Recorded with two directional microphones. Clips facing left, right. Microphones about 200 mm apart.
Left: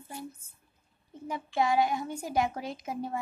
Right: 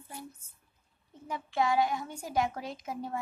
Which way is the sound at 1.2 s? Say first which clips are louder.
Left 1 dB; 15° left (ahead or behind).